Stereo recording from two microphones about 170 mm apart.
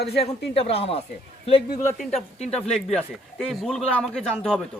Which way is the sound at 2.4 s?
40° left (ahead or behind).